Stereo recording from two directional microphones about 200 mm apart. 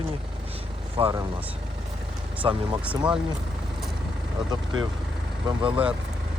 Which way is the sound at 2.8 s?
5° right (ahead or behind).